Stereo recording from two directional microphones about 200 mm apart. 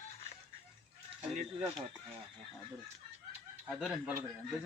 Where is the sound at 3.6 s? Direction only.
Centre (ahead or behind).